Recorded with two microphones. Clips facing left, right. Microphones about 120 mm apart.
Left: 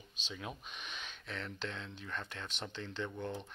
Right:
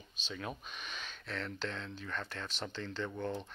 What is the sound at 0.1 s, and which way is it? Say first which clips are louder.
Speech: right 3 dB; 15° left (ahead or behind).